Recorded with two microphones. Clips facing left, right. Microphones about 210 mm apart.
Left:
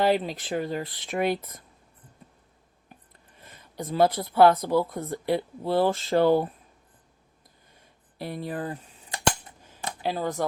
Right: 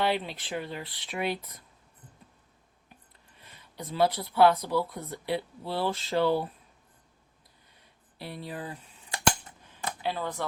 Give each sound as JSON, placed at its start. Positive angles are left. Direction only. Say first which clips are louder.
{"t": 0.0, "sound": "speech", "louder": "left 5 dB", "side_deg": 40}
{"t": 3.4, "sound": "speech", "louder": "left 6 dB", "side_deg": 45}
{"t": 8.2, "sound": "speech", "louder": "left 6 dB", "side_deg": 45}
{"t": 10.0, "sound": "speech", "louder": "left 5 dB", "side_deg": 40}